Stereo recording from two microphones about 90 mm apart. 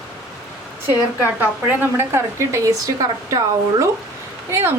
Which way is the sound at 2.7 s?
45° right (ahead or behind).